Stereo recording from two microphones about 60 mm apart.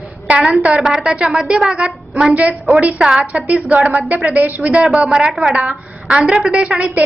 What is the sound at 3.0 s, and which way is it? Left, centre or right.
Speech, centre.